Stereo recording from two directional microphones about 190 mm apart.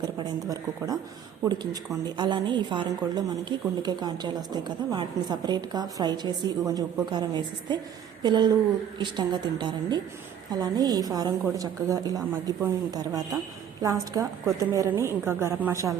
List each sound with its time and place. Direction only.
0.0 s a woman's voice: 20° right (ahead or behind)